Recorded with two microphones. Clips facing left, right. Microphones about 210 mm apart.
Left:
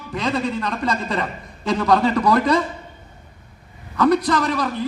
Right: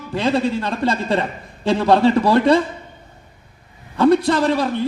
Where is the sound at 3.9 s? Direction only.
30° right (ahead or behind).